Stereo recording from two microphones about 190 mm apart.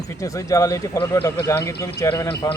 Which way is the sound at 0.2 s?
15° left (ahead or behind).